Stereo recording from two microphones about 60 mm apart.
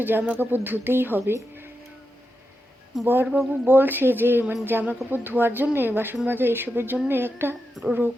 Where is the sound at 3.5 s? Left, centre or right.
Right.